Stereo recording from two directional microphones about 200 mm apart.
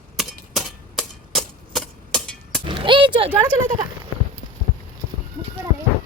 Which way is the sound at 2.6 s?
25° right (ahead or behind).